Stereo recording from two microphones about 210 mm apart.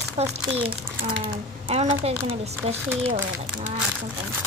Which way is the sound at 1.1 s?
45° right (ahead or behind).